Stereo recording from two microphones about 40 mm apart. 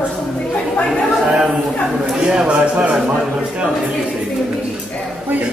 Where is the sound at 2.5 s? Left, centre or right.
Right.